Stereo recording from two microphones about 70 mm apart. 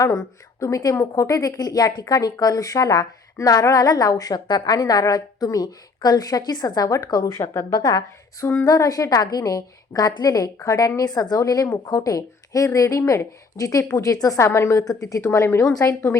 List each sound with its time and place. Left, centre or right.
0.0 s a woman's voice: left
11.4 s a woman's voice: left
14.8 s a woman's voice: left